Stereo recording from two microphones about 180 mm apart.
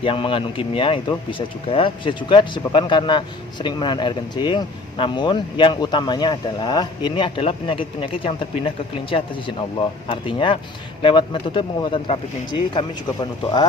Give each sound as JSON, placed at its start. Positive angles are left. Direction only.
{"t": 0.0, "sound": "speech", "side_deg": 30}